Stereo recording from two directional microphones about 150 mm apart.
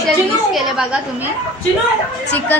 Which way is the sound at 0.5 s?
5° right (ahead or behind).